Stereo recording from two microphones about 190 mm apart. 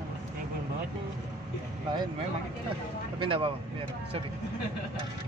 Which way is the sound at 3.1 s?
25° right (ahead or behind).